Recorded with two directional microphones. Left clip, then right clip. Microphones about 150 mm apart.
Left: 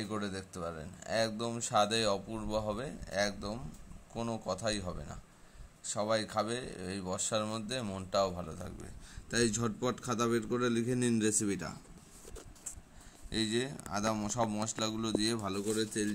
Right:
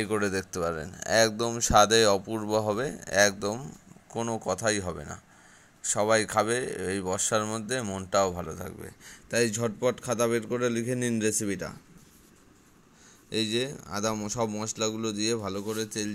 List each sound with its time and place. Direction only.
0.0 s speech: 40° right (ahead or behind)
4.1 s a man's voice: 35° right (ahead or behind); by 11.8 s 15° right (ahead or behind)
13.3 s a man's voice: 20° right (ahead or behind)
15.7 s speech: 45° right (ahead or behind)